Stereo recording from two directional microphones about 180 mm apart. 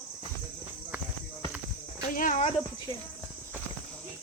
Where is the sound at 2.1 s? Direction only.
45° left (ahead or behind).